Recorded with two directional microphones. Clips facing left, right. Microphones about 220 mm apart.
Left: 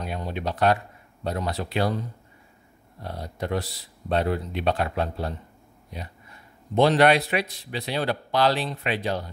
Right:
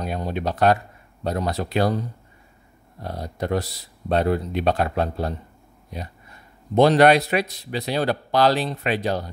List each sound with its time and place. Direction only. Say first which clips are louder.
0.0 s a man's voice: right 4 dB; 40° right (ahead or behind)
6.7 s a man's voice: right 4 dB; 40° right (ahead or behind)